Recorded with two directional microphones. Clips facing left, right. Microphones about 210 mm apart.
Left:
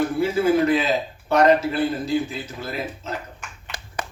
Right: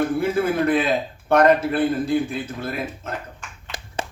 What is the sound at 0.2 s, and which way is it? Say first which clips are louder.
A man's voice: left 2 dB; 55° right (ahead or behind).